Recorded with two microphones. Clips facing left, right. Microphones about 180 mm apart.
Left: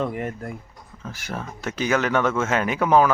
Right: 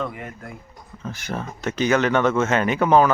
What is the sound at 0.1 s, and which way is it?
Speech, 45° left (ahead or behind).